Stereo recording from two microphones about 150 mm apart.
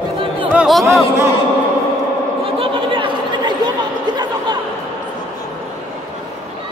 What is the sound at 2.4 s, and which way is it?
Chatter, 35° right (ahead or behind).